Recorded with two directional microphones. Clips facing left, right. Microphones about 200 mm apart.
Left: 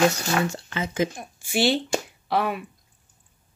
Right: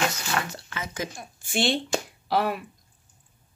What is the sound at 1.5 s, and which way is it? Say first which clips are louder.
Speech: left 3 dB; 5° left (ahead or behind).